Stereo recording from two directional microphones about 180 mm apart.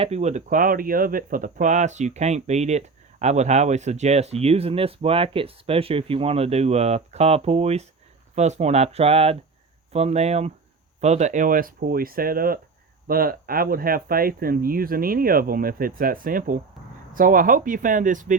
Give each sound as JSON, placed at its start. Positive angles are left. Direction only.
{"t": 0.0, "sound": "speech", "side_deg": -35}